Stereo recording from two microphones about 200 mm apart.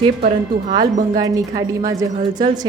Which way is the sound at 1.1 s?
20° right (ahead or behind).